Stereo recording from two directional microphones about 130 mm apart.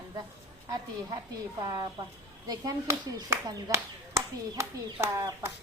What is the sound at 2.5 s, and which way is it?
Speech, 30° right (ahead or behind).